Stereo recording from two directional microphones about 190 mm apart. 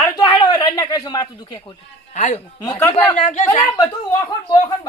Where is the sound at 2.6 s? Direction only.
20° left (ahead or behind).